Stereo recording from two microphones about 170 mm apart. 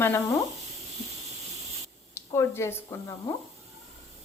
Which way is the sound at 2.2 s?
15° left (ahead or behind).